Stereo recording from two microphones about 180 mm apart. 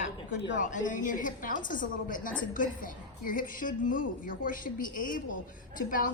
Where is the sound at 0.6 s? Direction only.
45° left (ahead or behind).